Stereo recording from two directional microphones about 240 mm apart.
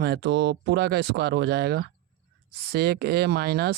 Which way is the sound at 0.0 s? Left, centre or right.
Right.